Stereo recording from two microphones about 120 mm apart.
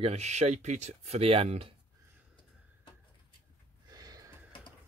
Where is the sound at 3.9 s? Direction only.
30° right (ahead or behind).